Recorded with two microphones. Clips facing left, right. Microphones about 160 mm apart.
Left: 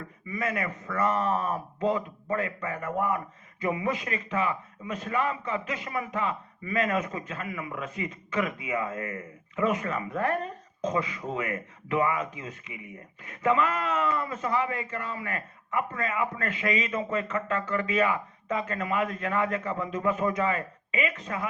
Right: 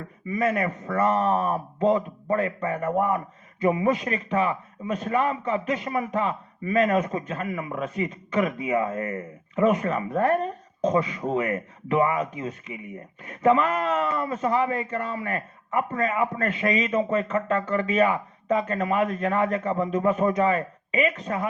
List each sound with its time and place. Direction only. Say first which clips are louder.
0.3 s speech: right 7 dB; 35° right (ahead or behind)